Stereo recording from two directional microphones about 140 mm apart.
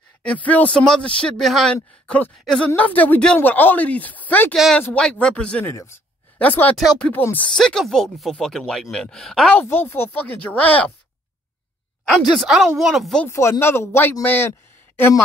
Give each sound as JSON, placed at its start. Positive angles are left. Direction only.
{"t": 0.2, "sound": "a man's voice", "side_deg": 10}
{"t": 6.8, "sound": "speech", "side_deg": 0}
{"t": 7.1, "sound": "a man's voice", "side_deg": 15}
{"t": 7.5, "sound": "speech", "side_deg": 5}
{"t": 9.6, "sound": "a man's voice", "side_deg": 15}
{"t": 12.0, "sound": "speech", "side_deg": 5}
{"t": 13.3, "sound": "a man's voice", "side_deg": 20}